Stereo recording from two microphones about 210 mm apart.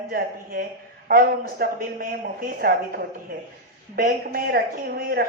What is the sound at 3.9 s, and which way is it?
Speech, 40° right (ahead or behind).